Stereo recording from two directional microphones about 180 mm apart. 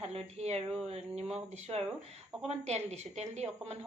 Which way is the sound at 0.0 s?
35° right (ahead or behind).